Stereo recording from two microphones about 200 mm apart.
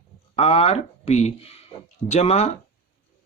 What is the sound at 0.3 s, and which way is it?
Speech, 30° left (ahead or behind).